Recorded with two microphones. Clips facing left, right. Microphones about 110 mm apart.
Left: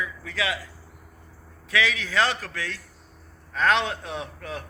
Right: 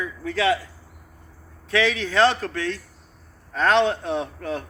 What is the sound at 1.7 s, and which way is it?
A man's voice, 30° right (ahead or behind).